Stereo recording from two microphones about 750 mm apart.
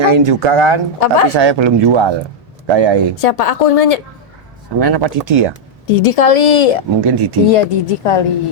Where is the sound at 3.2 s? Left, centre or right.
Left.